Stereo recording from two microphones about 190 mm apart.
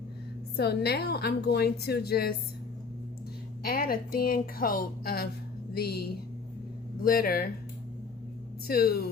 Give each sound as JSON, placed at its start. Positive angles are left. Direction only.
{"t": 0.5, "sound": "a woman's voice", "side_deg": 60}
{"t": 3.6, "sound": "a woman's voice", "side_deg": 50}
{"t": 8.6, "sound": "speech", "side_deg": 55}